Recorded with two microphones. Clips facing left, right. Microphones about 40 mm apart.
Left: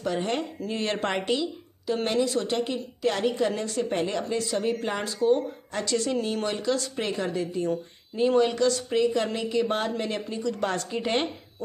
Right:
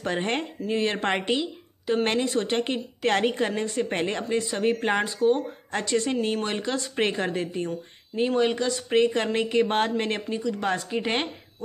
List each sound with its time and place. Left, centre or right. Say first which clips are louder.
0.0 s a woman's voice: right 1 dB; right
0.6 s speech: right 3 dB; centre
0.9 s a woman's voice: right 1 dB; right
5.0 s a woman's voice: left 3 dB; right
5.7 s a woman's voice: right 2 dB; right
7.0 s a woman's voice: right 3 dB; right
8.4 s a woman's voice: left 2 dB; right
8.9 s a woman's voice: right 2 dB; right
10.3 s a woman's voice: even; centre